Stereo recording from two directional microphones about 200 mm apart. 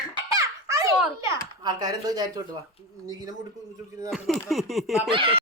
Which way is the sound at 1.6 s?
20° right (ahead or behind).